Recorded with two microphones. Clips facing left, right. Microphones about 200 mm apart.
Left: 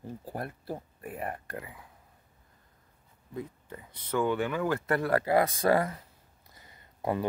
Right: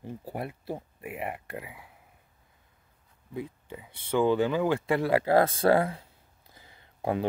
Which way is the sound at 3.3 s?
15° right (ahead or behind).